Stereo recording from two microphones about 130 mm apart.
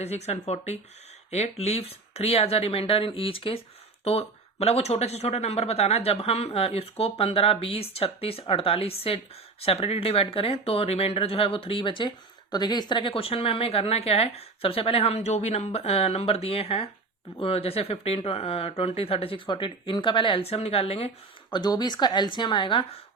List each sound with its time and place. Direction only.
0.0 s speech: 55° left (ahead or behind)
21.5 s a woman's voice: 35° left (ahead or behind)